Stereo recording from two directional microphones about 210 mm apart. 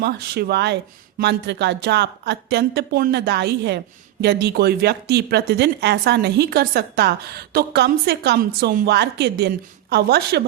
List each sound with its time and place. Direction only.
0.0 s speech: 50° right (ahead or behind)